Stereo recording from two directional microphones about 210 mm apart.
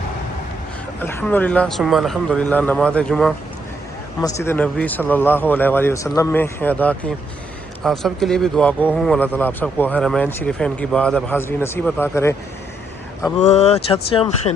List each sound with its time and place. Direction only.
1.0 s a man's voice: 10° left (ahead or behind)
4.2 s a man's voice: 10° left (ahead or behind)
13.4 s speech: 30° left (ahead or behind)